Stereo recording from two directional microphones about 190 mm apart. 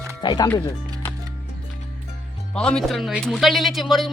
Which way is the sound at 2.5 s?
5° left (ahead or behind).